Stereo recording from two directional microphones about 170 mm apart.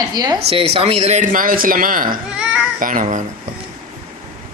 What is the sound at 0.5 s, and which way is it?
Speech, 35° right (ahead or behind).